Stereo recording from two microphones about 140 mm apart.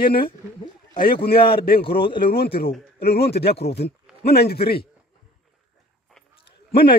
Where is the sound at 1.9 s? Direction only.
35° left (ahead or behind).